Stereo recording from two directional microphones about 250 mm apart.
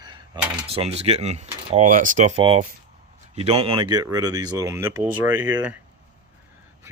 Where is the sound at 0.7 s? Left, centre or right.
Right.